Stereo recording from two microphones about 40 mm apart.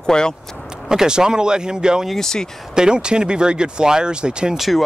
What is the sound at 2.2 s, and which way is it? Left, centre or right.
Speech, centre.